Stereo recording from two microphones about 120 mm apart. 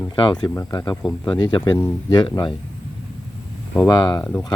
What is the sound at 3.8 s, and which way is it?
Speech, 30° left (ahead or behind).